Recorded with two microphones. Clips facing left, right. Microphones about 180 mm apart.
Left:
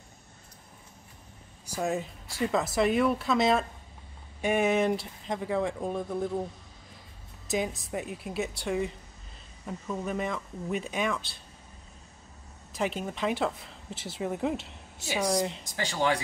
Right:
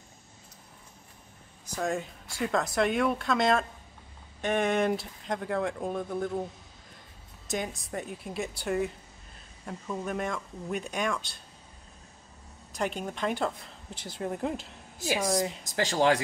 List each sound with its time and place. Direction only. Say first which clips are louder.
1.8 s speech: left 1 dB; centre (ahead or behind)
7.4 s speech: left 3 dB; centre (ahead or behind)
12.7 s speech: left 1 dB; centre (ahead or behind)
15.6 s speech: right 4 dB; 45° right (ahead or behind)